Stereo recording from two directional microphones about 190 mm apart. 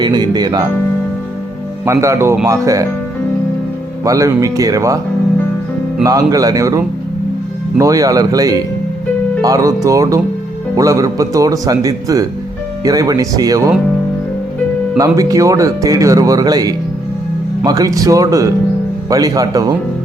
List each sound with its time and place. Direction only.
0.0 s music: 20° right (ahead or behind)
1.8 s speech: 15° right (ahead or behind)
4.0 s speech: 15° right (ahead or behind)
6.0 s speech: 20° right (ahead or behind)
14.9 s speech: 20° right (ahead or behind)